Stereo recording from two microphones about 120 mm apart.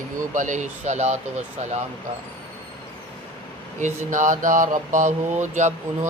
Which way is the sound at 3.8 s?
90° right.